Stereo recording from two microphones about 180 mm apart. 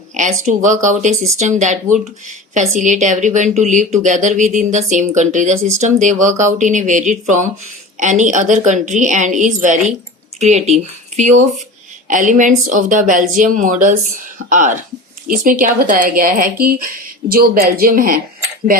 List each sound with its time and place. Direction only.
0.1 s speech: 45° right (ahead or behind)